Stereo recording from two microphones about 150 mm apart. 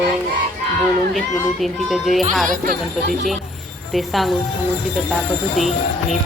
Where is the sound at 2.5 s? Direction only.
85° right.